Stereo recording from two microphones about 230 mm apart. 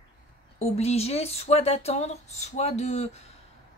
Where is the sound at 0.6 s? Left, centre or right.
Left.